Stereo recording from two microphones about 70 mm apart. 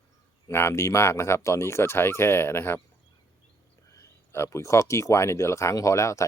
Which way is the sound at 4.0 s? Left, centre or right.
Left.